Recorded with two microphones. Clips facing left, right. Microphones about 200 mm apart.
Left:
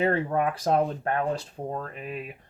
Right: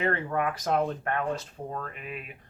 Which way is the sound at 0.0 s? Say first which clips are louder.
Left 4 dB; 30° left (ahead or behind).